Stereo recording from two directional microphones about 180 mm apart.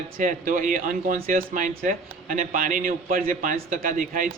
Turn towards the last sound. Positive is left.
turn(degrees=-50)  # may be behind; listen again after turning